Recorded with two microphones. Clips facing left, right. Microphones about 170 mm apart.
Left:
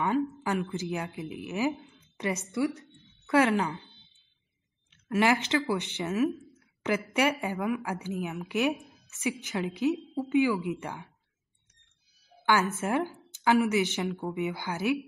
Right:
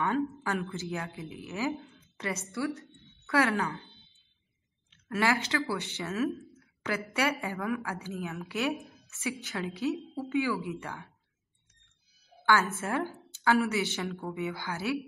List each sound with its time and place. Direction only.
0.0 s a woman's voice: 15° left (ahead or behind)
5.0 s a woman's voice: 20° left (ahead or behind)
12.7 s a woman's voice: 20° left (ahead or behind)